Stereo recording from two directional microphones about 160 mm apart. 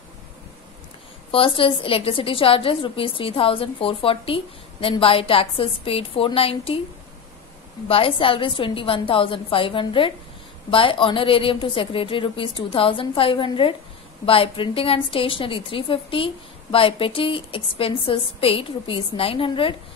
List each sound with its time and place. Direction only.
1.3 s a woman's voice: 35° left (ahead or behind)
7.9 s a woman's voice: 35° left (ahead or behind)